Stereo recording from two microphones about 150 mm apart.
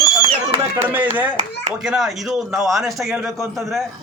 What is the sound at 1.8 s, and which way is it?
A man's voice, 5° right (ahead or behind).